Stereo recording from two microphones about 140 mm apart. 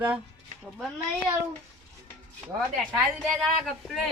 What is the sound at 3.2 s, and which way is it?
Speech, centre (ahead or behind).